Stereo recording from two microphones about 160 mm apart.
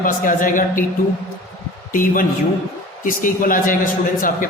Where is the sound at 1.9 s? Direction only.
60° left (ahead or behind).